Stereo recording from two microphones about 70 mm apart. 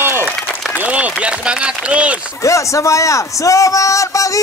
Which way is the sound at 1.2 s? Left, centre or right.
Centre.